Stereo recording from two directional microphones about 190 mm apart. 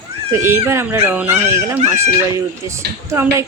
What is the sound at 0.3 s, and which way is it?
Speech, 15° right (ahead or behind).